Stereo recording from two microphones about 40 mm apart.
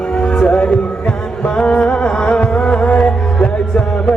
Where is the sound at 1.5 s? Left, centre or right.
Left.